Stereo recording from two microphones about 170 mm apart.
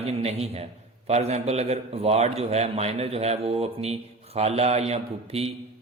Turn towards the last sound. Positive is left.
turn(degrees=-35)  # may be behind; listen again after turning